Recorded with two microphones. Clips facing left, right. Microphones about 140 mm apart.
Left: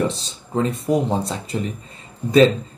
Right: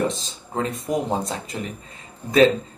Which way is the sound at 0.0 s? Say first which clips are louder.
Left 1 dB; 35° left (ahead or behind).